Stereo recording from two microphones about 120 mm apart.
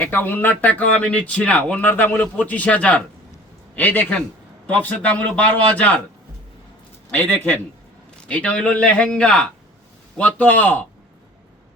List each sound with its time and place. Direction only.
0.0 s speech: 15° left (ahead or behind)
7.1 s speech: 15° left (ahead or behind)